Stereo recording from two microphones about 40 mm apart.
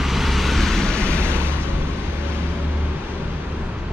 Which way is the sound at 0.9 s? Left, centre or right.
Left.